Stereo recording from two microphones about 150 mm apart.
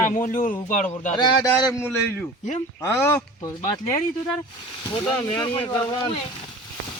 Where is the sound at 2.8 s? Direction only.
20° left (ahead or behind).